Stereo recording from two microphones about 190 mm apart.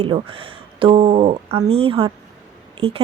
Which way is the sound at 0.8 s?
30° right (ahead or behind).